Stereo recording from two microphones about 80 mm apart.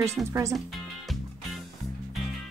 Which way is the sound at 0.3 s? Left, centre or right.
Right.